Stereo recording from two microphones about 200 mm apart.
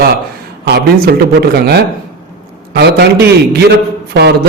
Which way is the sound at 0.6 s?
55° right (ahead or behind).